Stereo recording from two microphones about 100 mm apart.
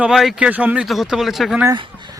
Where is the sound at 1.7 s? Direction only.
50° right (ahead or behind).